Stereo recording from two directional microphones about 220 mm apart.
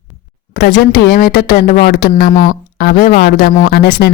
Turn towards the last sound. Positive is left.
turn(degrees=45)  # may be behind; listen again after turning